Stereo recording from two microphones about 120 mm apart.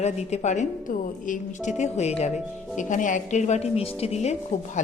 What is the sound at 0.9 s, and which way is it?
A woman's voice, 90° left.